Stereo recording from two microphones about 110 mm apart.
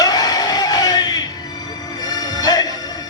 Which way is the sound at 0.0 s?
35° left (ahead or behind).